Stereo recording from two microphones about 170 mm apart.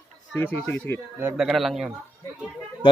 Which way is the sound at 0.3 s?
10° left (ahead or behind).